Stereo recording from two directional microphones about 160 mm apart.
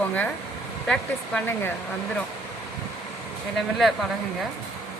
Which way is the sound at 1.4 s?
10° left (ahead or behind).